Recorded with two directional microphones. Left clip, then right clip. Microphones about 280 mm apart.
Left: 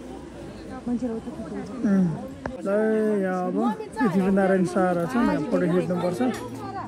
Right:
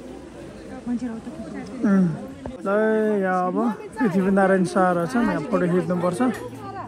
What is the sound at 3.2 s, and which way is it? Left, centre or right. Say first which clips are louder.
Speech: right 4 dB; centre.